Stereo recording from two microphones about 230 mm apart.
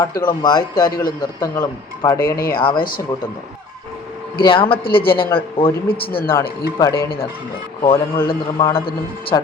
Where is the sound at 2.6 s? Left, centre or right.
Left.